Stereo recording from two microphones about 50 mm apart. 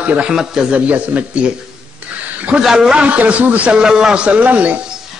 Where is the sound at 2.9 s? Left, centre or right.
Right.